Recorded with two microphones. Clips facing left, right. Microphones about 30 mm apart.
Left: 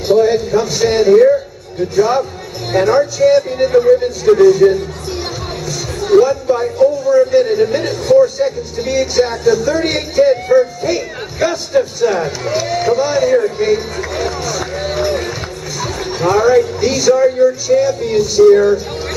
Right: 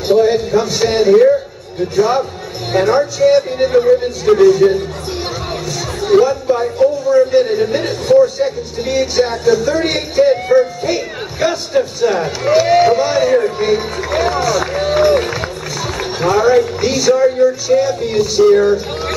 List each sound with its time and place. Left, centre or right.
0.1 s speech: centre
6.2 s speech: centre
15.0 s run: right
15.8 s speech: centre